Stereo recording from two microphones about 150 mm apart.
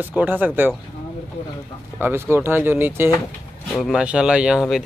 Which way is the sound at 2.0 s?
15° right (ahead or behind).